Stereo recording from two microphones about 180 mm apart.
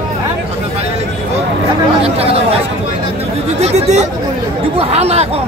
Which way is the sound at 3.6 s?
35° right (ahead or behind).